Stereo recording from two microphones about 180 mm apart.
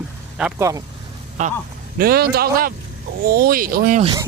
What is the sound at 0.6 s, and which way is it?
Speech, 15° right (ahead or behind).